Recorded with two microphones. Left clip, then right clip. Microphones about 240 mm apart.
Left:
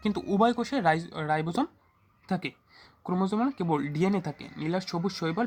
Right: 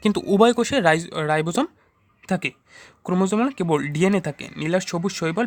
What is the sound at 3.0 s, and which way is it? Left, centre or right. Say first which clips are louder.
Speech: right 7 dB; right.